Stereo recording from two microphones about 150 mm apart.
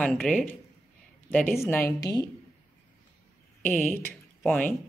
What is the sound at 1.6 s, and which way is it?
Speech, 15° left (ahead or behind).